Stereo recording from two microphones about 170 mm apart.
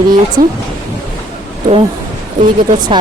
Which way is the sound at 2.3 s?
50° right (ahead or behind).